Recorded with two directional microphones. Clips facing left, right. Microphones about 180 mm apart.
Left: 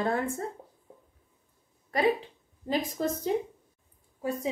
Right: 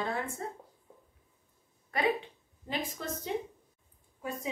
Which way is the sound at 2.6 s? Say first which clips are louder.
Left 7 dB; 40° left (ahead or behind).